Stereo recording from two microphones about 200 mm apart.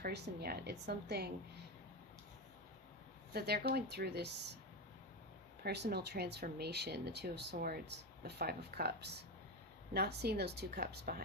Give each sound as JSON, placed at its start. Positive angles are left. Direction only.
{"t": 0.0, "sound": "a woman's voice", "side_deg": -55}
{"t": 3.3, "sound": "a woman's voice", "side_deg": -55}
{"t": 5.6, "sound": "a woman's voice", "side_deg": -55}